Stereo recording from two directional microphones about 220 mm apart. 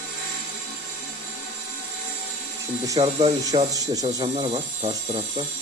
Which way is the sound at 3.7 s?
15° right (ahead or behind).